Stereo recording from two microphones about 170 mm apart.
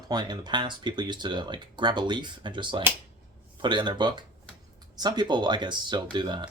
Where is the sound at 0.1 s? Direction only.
25° right (ahead or behind).